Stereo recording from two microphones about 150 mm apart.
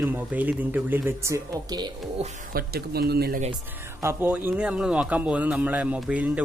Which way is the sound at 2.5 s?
90° right.